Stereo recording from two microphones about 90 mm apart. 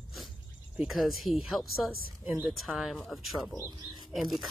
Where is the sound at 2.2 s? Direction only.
20° right (ahead or behind).